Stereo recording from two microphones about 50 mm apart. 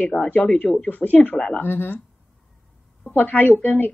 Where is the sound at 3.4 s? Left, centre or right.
Left.